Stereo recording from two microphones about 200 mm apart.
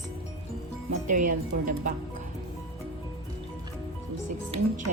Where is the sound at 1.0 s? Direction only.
40° right (ahead or behind).